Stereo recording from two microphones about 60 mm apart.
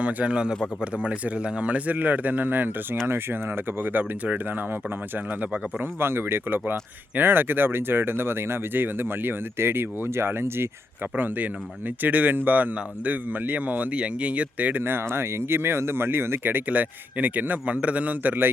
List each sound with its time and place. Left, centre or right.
0.0 s speech: right
12.0 s speech: right
16.6 s speech: right